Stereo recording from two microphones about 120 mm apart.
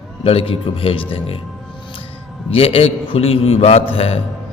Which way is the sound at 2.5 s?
50° left (ahead or behind).